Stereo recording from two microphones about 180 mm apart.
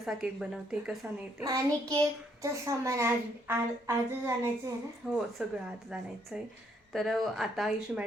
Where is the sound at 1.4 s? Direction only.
20° right (ahead or behind); by 5.5 s 5° right (ahead or behind).